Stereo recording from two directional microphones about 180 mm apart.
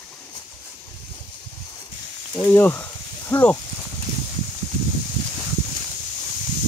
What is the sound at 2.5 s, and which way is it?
Snake, 10° left (ahead or behind).